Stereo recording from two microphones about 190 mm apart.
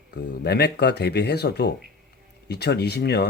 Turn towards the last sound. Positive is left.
turn(degrees=60)  # may be behind; listen again after turning